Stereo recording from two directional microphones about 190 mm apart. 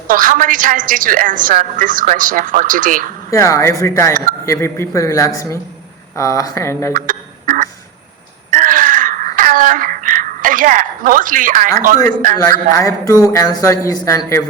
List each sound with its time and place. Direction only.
0.1 s a woman's voice: 45° right (ahead or behind)
3.2 s a man's voice: 15° left (ahead or behind)
6.9 s fowl: 45° right (ahead or behind)
8.4 s wail: 45° right (ahead or behind)
12.0 s a woman's voice: 45° right (ahead or behind)
12.5 s a man's voice: 15° left (ahead or behind)